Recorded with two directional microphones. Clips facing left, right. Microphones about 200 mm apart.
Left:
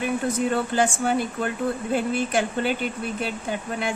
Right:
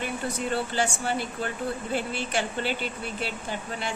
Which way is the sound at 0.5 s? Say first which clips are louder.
Left 5 dB; 50° left (ahead or behind).